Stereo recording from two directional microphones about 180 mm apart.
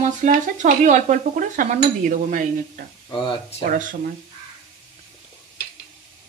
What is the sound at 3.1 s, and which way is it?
Speech, 25° left (ahead or behind).